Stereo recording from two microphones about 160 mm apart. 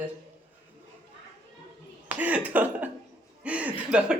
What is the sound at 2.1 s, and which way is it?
A man's voice, 10° right (ahead or behind).